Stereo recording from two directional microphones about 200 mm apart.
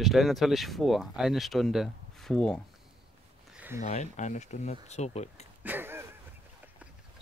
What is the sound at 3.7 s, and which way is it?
Speech, 35° left (ahead or behind).